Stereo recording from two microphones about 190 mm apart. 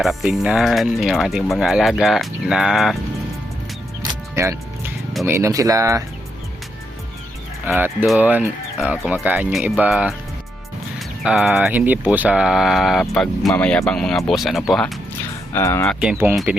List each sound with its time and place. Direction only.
0.0 s speech: centre (ahead or behind)
4.1 s music: 15° right (ahead or behind)
5.2 s speech: 15° right (ahead or behind)
7.7 s speech: 10° right (ahead or behind)
11.2 s speech: 5° right (ahead or behind)
15.5 s speech: 15° left (ahead or behind)
15.9 s speech: 5° right (ahead or behind)